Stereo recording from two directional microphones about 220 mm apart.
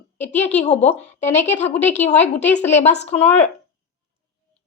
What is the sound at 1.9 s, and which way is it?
Speech, 30° left (ahead or behind).